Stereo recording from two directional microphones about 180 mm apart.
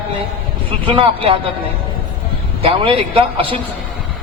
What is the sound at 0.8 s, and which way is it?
Speech, 30° right (ahead or behind).